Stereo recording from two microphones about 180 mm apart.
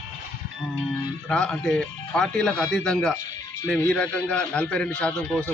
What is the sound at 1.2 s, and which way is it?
A man's voice, 5° left (ahead or behind).